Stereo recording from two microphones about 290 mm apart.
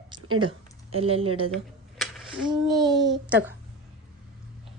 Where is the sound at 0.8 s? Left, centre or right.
Centre.